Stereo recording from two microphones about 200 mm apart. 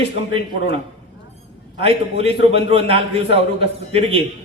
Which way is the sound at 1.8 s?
30° right (ahead or behind).